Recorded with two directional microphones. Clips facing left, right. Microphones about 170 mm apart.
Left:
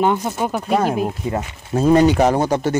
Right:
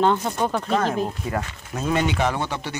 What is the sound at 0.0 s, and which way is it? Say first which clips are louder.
Speech: left 2 dB; 10° left (ahead or behind).